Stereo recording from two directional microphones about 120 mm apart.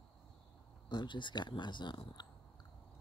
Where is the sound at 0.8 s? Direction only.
40° left (ahead or behind).